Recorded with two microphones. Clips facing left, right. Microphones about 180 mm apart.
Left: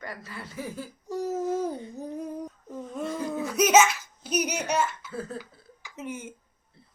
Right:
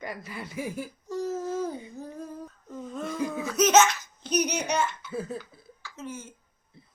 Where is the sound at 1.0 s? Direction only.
15° left (ahead or behind).